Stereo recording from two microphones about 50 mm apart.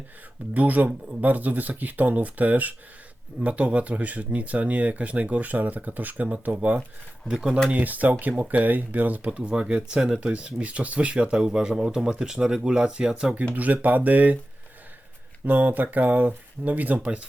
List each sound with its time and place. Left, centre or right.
0.5 s speech: right
7.3 s speech: centre
7.7 s speech: right; by 13.3 s centre
13.5 s speech: right
15.4 s speech: right